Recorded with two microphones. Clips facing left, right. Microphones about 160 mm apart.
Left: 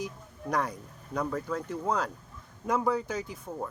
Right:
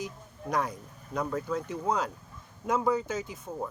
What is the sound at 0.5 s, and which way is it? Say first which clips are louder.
Speech: even; 5° right (ahead or behind).